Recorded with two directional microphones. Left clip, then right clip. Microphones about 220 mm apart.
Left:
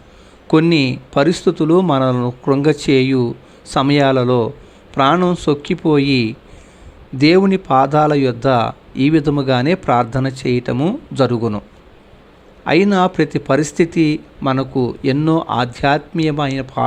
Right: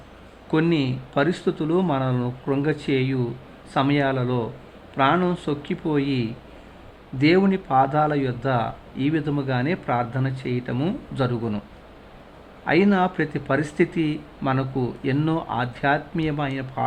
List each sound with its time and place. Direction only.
0.7 s speech: 25° left (ahead or behind)
12.6 s speech: 20° left (ahead or behind)